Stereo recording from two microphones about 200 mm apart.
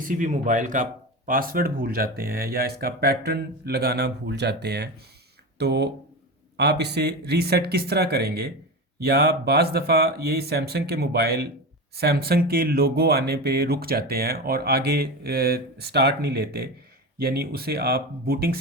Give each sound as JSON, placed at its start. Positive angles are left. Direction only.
{"t": 0.0, "sound": "speech", "side_deg": -40}